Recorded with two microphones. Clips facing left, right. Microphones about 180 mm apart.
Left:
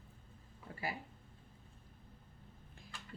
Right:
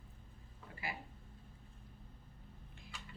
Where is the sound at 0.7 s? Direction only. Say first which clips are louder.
Left 4 dB; 40° left (ahead or behind).